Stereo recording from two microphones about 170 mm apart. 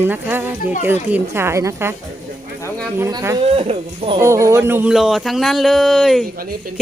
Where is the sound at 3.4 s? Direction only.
35° right (ahead or behind).